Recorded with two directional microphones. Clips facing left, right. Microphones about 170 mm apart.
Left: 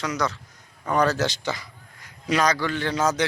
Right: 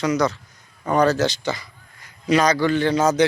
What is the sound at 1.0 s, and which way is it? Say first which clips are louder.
Speech: right 4 dB; 10° left (ahead or behind).